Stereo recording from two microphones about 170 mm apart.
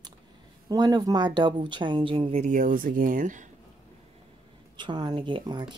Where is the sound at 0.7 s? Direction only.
20° right (ahead or behind).